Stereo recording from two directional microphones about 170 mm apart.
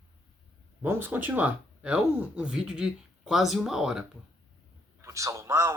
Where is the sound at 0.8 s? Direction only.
10° right (ahead or behind).